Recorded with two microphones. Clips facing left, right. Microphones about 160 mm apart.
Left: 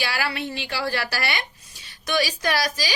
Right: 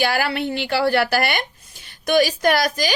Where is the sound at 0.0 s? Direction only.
50° right (ahead or behind).